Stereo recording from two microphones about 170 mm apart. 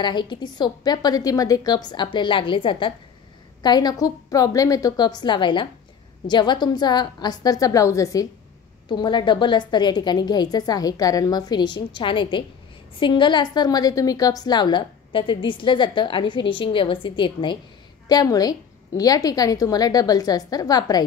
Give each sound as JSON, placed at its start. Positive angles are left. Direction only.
{"t": 0.0, "sound": "a woman's voice", "side_deg": 25}